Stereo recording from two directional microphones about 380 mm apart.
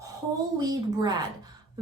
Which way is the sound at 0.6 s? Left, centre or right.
Centre.